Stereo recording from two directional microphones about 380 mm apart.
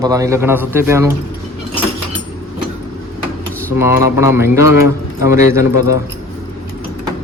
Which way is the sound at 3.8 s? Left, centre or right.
Centre.